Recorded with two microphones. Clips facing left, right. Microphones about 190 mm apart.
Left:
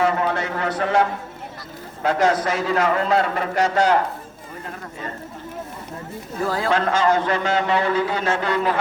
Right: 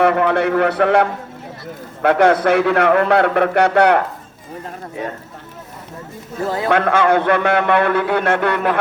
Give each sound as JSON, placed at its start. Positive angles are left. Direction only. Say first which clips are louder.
{"t": 0.0, "sound": "a man's voice", "louder": "right 6 dB", "side_deg": -65}
{"t": 6.4, "sound": "speech", "louder": "right 2 dB", "side_deg": -20}
{"t": 6.7, "sound": "a man's voice", "louder": "right 5 dB", "side_deg": -60}